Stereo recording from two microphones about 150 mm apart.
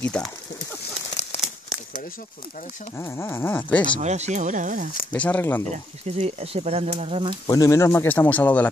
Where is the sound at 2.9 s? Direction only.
20° left (ahead or behind).